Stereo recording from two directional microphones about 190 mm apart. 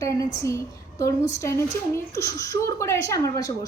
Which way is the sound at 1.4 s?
15° left (ahead or behind).